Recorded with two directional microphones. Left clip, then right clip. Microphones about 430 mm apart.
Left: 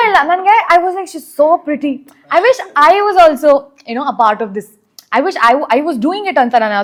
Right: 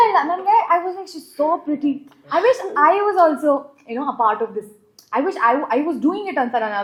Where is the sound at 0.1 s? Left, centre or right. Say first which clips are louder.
Left 7 dB; left.